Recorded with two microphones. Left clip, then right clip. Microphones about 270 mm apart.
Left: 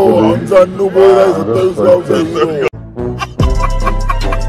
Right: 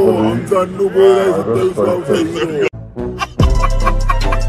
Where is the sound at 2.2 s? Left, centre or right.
Left.